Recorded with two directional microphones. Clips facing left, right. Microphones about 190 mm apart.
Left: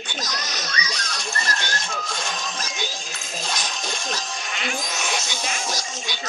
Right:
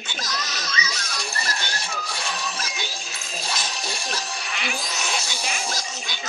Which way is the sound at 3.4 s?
10° right (ahead or behind).